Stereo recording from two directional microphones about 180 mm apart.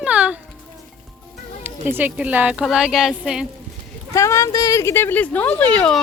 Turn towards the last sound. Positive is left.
turn(degrees=5)  # may be behind; listen again after turning